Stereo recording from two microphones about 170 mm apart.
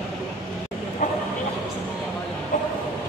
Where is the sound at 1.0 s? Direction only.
45° left (ahead or behind).